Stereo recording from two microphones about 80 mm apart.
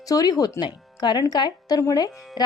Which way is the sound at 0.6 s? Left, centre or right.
Left.